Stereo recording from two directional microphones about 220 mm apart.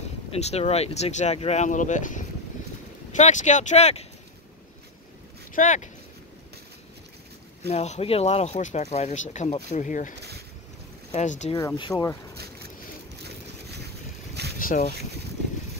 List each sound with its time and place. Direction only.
0.3 s speech: 30° left (ahead or behind)
5.5 s speech: 35° left (ahead or behind)
7.7 s speech: 30° left (ahead or behind)
10.1 s a sound: 50° right (ahead or behind)
11.1 s speech: 30° left (ahead or behind)
11.5 s speech: 20° left (ahead or behind)
14.6 s speech: 40° left (ahead or behind)